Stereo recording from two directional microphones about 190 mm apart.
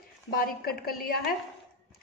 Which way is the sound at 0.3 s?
50° left (ahead or behind).